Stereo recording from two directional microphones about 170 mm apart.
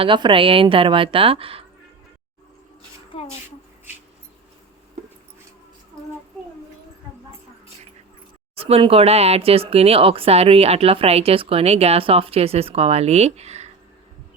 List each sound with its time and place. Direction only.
0.0 s speech: 30° right (ahead or behind)
8.5 s speech: 35° right (ahead or behind)